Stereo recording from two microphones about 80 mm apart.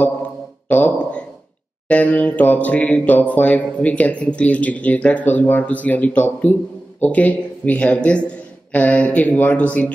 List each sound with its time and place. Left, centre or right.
0.7 s speech: left